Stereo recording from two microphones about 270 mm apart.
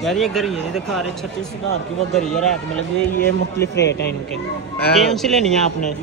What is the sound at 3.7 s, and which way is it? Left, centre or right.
Speech, left.